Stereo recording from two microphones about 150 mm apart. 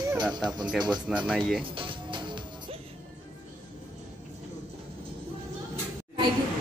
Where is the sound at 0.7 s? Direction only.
5° right (ahead or behind).